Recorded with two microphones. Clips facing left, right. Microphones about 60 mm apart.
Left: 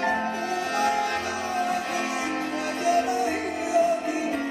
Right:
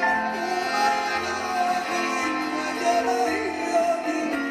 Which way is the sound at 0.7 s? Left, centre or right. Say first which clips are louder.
Right 1 dB; right.